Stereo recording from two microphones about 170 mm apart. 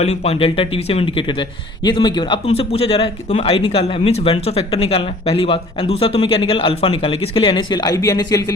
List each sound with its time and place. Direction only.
0.0 s speech: 40° left (ahead or behind); by 8.5 s 20° left (ahead or behind)